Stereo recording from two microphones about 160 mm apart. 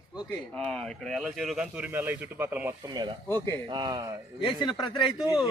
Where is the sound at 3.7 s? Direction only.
25° right (ahead or behind).